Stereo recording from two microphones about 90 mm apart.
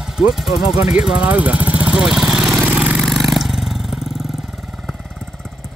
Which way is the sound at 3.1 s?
Centre (ahead or behind).